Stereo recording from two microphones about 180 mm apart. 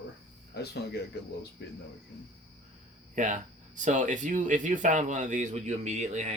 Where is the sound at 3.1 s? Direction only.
45° right (ahead or behind).